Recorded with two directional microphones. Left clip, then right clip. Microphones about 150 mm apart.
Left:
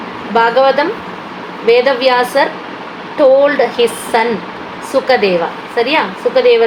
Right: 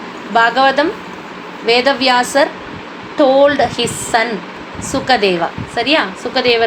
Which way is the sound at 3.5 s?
45° right (ahead or behind).